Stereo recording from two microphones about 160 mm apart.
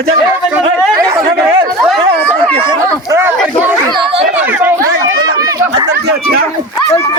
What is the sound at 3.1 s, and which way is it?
Chatter, 15° right (ahead or behind).